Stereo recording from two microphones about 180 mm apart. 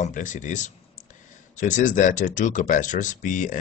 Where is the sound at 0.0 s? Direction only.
45° left (ahead or behind).